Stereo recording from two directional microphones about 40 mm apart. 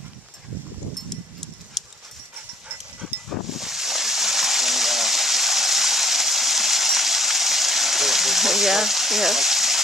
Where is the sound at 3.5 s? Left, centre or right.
Centre.